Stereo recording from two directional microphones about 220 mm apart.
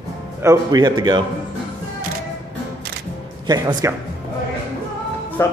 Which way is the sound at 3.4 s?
20° right (ahead or behind).